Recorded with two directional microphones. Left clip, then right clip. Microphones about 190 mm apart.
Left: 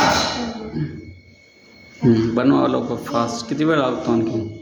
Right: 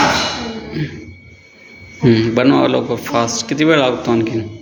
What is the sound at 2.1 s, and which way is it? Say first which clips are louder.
A man's voice: right 4 dB; centre (ahead or behind).